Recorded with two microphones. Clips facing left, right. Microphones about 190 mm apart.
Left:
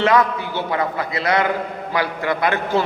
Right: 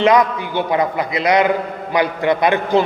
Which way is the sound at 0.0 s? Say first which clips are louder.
Right 3 dB; 15° right (ahead or behind).